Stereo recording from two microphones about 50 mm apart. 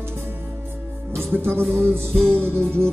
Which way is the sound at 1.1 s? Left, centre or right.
Right.